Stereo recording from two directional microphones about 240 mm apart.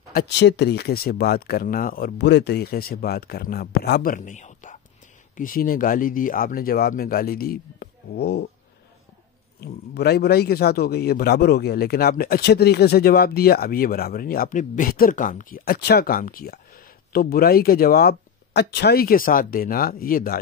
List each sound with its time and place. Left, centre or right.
0.1 s a man's voice: left
9.6 s a man's voice: left